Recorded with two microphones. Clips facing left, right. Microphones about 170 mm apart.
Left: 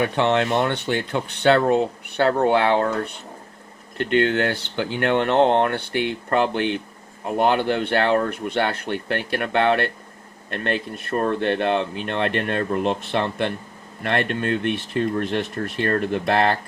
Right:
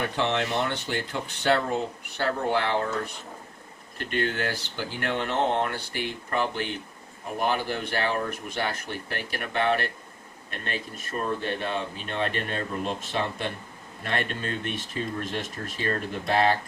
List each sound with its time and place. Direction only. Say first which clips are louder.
0.0 s speech: left 7 dB; 65° left (ahead or behind)